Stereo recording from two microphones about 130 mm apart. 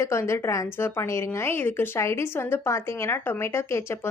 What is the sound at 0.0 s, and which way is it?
A woman's voice, 20° left (ahead or behind).